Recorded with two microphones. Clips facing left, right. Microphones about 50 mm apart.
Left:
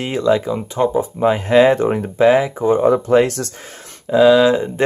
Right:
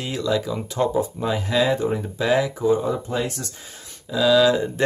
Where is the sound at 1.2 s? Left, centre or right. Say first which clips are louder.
Left 11 dB; left.